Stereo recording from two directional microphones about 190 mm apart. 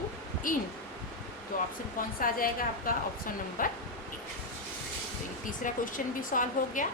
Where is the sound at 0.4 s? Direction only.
45° left (ahead or behind).